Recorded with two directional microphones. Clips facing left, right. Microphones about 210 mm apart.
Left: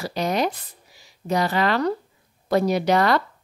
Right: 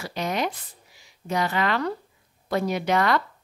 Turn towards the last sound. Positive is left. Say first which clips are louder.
# left 3 dB
turn(degrees=35)  # may be behind; listen again after turning